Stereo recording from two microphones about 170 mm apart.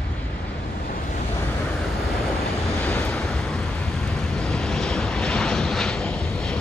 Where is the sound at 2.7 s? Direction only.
15° left (ahead or behind).